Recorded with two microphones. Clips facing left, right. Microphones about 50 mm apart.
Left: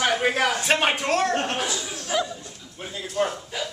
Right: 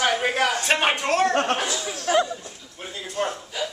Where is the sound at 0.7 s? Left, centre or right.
Centre.